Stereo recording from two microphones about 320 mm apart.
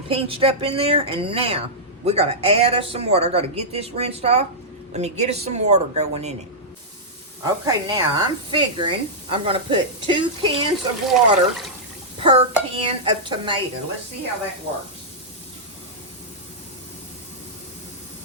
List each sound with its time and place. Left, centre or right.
0.1 s a woman's voice: centre
7.4 s speech: centre
11.1 s speech: centre
12.2 s speech: centre